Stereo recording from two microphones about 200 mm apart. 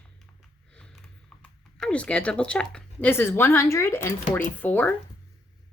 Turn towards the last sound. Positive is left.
turn(degrees=10)  # may be behind; listen again after turning